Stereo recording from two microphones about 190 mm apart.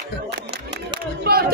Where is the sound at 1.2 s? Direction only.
50° right (ahead or behind).